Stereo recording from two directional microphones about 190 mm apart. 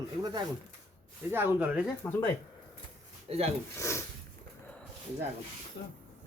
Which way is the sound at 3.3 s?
30° right (ahead or behind).